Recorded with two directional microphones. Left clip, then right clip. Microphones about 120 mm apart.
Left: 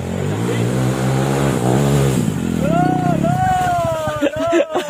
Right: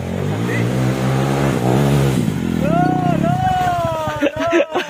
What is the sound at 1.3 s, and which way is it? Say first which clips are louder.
Vehicle: even; centre (ahead or behind).